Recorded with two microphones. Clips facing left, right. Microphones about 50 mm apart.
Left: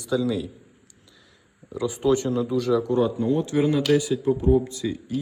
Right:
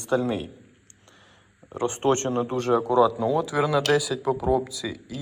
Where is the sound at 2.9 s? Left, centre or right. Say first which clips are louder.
Right 2 dB; right.